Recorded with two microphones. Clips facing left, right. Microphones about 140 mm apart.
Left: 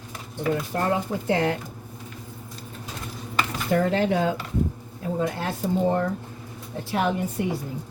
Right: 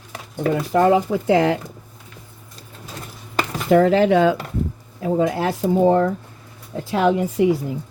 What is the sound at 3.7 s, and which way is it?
Speech, 90° right.